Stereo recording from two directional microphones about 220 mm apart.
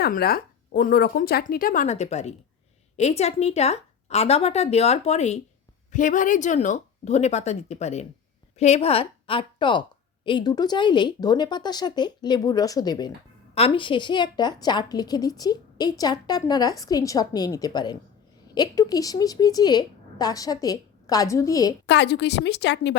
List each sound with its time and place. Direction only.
0.0 s a woman's voice: 45° left (ahead or behind); by 21.8 s 15° left (ahead or behind)
21.8 s a woman's voice: 50° left (ahead or behind)